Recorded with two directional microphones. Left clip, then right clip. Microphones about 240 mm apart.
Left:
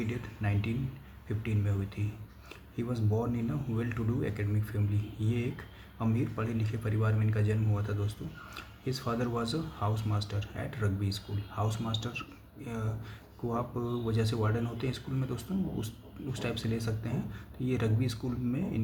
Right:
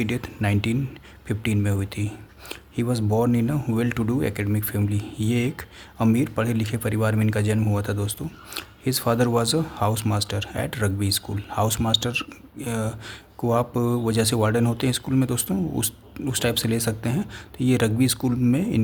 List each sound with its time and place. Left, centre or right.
0.0 s speech: right